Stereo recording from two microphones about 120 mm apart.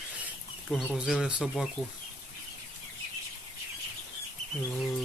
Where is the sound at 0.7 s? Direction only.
Centre (ahead or behind).